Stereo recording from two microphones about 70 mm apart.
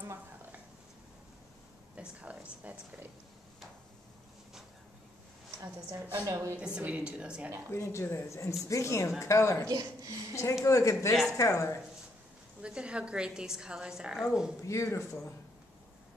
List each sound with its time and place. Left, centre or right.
2.0 s a sound: centre
2.6 s speech: right
6.2 s a woman's voice: right
6.6 s a woman's voice: centre
7.7 s speech: left
9.7 s speech: right
10.3 s speech: left
12.6 s a woman's voice: centre
14.6 s speech: left